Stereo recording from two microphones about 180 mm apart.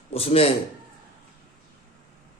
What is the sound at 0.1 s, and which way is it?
Speech, 35° left (ahead or behind).